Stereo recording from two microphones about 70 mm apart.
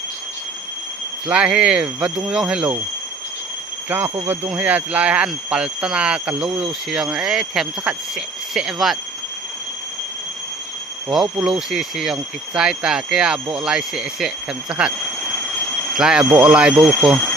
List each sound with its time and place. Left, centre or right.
1.3 s speech: centre
3.8 s speech: right
4.5 s speech: right; by 9.0 s centre
11.1 s speech: centre
16.8 s speech: centre